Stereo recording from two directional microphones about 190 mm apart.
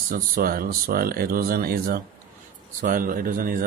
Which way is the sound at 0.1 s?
50° right (ahead or behind).